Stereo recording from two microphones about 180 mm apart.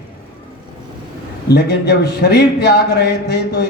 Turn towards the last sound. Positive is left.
turn(degrees=65)  # may be behind; listen again after turning